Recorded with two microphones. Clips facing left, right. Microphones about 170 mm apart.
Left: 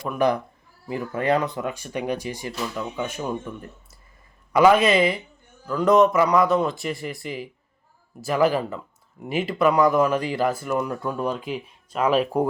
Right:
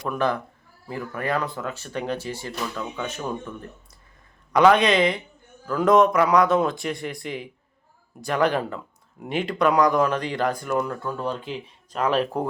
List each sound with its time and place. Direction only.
0.2 s speech: 15° left (ahead or behind)
4.5 s speech: 5° left (ahead or behind)